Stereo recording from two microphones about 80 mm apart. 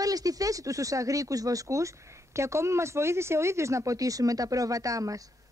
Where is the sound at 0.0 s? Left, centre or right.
Right.